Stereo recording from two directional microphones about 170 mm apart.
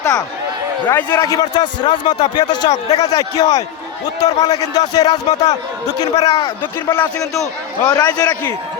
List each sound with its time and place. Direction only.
0.0 s a man's voice: 20° left (ahead or behind)
7.9 s speech: 20° left (ahead or behind)